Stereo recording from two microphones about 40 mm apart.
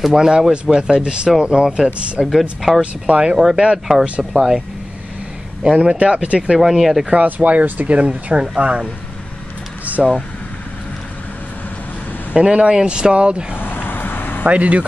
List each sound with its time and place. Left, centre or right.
0.0 s speech: centre
2.2 s speech: centre
2.8 s speech: right
3.7 s speech: centre
5.6 s speech: right
6.5 s speech: centre
7.2 s speech: right
9.9 s speech: right
12.4 s speech: right
13.6 s vehicle: left
14.4 s speech: right